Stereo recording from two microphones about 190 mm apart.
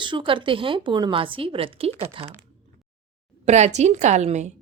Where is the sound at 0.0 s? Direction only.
25° right (ahead or behind).